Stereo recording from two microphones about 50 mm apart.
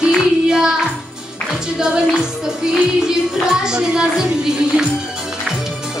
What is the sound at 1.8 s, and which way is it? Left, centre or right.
Music, centre.